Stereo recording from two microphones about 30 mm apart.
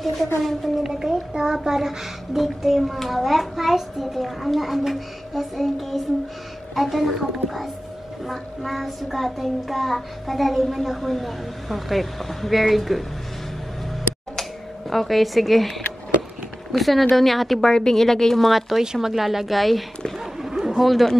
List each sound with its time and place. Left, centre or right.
0.0 s a child's voice: centre
0.8 s a child's voice: centre
14.9 s a child's voice: centre
16.7 s a child's voice: centre
17.6 s speech: centre
18.9 s a child's voice: centre
20.4 s chatter: centre
20.8 s a child's voice: centre